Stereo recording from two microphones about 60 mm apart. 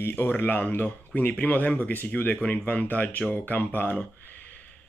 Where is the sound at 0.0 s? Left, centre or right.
Left.